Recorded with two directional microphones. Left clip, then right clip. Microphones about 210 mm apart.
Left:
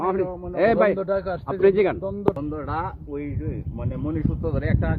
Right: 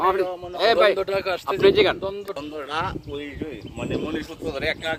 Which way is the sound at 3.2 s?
5° right (ahead or behind).